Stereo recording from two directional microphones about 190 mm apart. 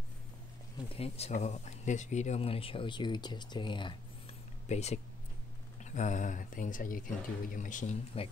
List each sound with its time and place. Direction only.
0.8 s speech: 30° left (ahead or behind)
4.6 s speech: 35° left (ahead or behind)